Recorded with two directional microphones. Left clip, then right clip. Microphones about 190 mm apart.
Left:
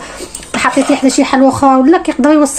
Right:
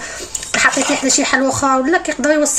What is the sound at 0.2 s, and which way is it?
Speech, 20° left (ahead or behind).